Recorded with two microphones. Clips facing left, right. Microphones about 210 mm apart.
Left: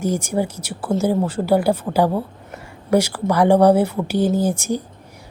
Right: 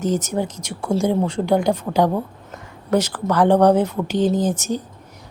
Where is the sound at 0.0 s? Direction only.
10° left (ahead or behind).